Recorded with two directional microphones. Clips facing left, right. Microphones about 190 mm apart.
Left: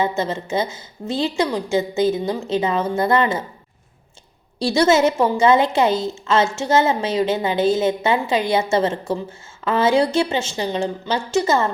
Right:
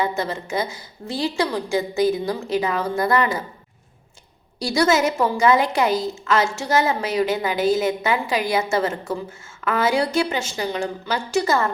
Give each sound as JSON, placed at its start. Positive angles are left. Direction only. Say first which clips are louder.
{"t": 0.0, "sound": "a woman's voice", "louder": "left 2 dB", "side_deg": 25}
{"t": 4.6, "sound": "a woman's voice", "louder": "left 3 dB", "side_deg": 25}